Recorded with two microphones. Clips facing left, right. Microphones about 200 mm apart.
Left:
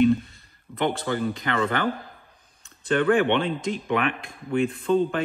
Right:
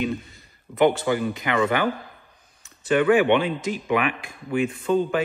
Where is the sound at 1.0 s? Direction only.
10° right (ahead or behind).